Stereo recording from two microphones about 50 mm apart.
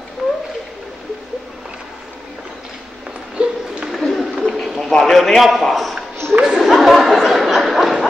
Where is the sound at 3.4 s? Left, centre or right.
Right.